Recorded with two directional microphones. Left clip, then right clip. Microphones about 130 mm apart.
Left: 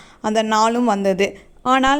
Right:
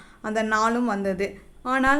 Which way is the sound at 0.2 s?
50° left (ahead or behind).